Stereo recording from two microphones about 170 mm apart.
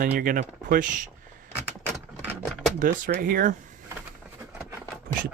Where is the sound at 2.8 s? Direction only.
55° right (ahead or behind).